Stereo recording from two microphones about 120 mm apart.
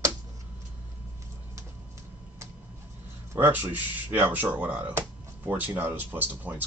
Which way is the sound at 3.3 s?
15° right (ahead or behind).